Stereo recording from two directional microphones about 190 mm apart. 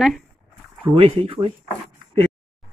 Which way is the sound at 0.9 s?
30° right (ahead or behind).